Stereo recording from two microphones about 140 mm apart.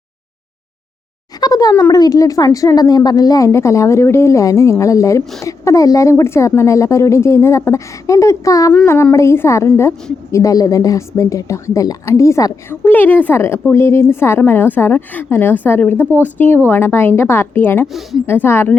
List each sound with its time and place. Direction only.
1.4 s a sound: 25° left (ahead or behind)
1.8 s a woman's voice: 25° left (ahead or behind)
12.8 s a woman's voice: 10° left (ahead or behind)